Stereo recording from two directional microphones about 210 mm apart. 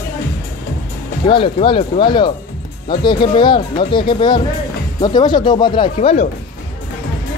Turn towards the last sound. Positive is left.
turn(degrees=30)  # may be behind; listen again after turning